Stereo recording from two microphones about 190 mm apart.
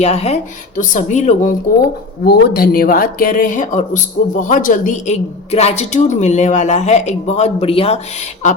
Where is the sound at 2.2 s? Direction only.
55° left (ahead or behind); by 7.9 s 30° left (ahead or behind).